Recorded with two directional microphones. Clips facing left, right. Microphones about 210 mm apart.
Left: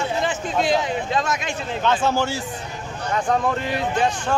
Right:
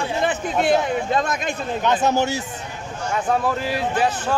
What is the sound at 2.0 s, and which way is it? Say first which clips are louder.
Speech: right 2 dB; 20° right (ahead or behind).